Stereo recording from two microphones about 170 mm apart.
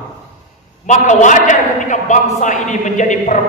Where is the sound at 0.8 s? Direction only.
45° left (ahead or behind).